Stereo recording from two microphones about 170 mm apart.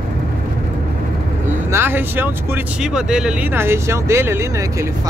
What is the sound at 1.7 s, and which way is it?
Speech, 15° right (ahead or behind).